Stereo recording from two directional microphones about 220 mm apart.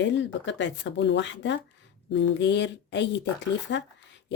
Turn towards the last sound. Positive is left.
turn(degrees=55)  # may be behind; listen again after turning